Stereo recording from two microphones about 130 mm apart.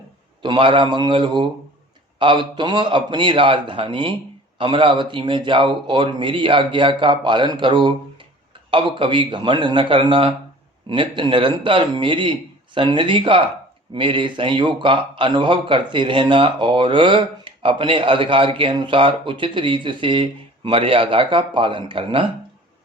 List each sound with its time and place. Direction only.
0.4 s a man's voice: 40° right (ahead or behind)